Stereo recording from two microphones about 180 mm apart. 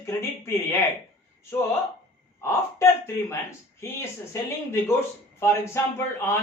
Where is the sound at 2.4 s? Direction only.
15° left (ahead or behind).